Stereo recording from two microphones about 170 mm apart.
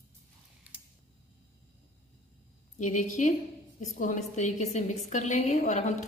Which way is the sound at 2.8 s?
45° left (ahead or behind).